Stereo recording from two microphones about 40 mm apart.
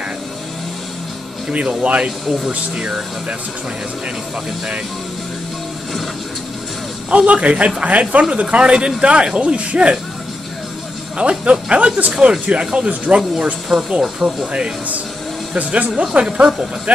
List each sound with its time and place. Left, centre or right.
1.5 s speech: right
7.1 s speech: right
11.1 s speech: right
13.7 s speech: centre
14.2 s speech: right
15.5 s speech: right
16.0 s speech: right